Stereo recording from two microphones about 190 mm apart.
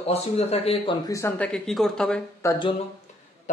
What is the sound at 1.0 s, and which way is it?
Speech, 15° left (ahead or behind).